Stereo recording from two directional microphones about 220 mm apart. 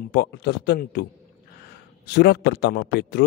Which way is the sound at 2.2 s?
50° left (ahead or behind).